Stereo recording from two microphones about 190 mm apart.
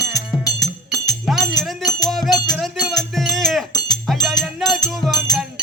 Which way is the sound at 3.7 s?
20° left (ahead or behind).